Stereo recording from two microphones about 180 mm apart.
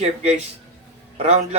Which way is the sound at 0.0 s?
35° right (ahead or behind).